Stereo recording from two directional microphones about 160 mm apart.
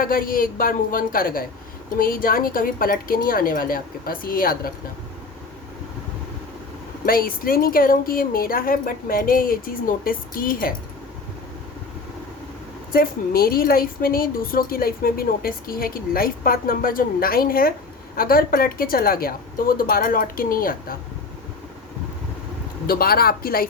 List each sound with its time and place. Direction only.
0.0 s a woman's voice: 60° left (ahead or behind)
7.0 s a woman's voice: 65° left (ahead or behind)
12.9 s a woman's voice: 65° left (ahead or behind)
22.9 s speech: 70° left (ahead or behind)